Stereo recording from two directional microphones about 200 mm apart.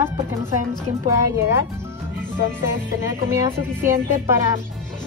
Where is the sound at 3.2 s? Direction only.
15° right (ahead or behind).